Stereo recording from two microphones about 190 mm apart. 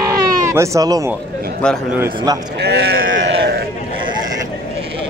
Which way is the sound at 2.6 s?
55° right (ahead or behind).